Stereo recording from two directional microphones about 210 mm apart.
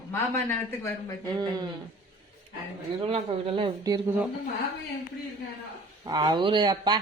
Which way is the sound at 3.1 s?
25° right (ahead or behind).